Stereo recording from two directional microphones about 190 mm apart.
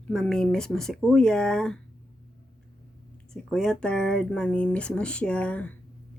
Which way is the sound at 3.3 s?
5° left (ahead or behind).